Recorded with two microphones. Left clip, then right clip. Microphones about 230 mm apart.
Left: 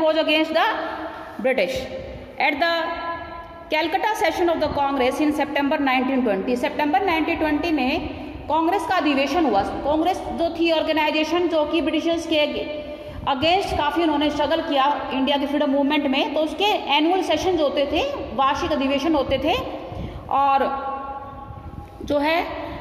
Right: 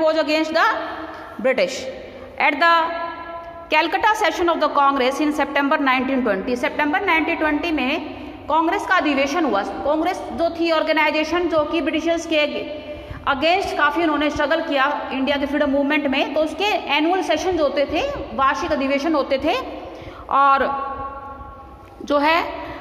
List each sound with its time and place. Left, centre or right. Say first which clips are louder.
0.0 s a woman's voice: right 1 dB; centre
22.0 s a woman's voice: right 3 dB; centre